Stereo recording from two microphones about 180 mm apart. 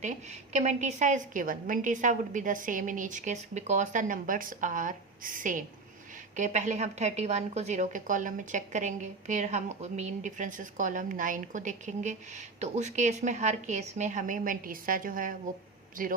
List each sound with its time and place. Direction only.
0.0 s speech: 40° right (ahead or behind)